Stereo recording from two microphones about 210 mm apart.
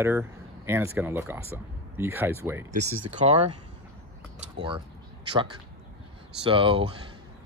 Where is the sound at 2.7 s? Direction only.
30° right (ahead or behind).